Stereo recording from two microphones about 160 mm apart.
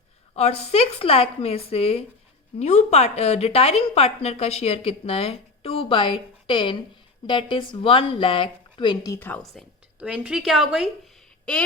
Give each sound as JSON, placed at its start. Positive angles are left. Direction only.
{"t": 0.3, "sound": "a woman's voice", "side_deg": 40}
{"t": 9.1, "sound": "a woman's voice", "side_deg": 10}
{"t": 9.4, "sound": "speech", "side_deg": 0}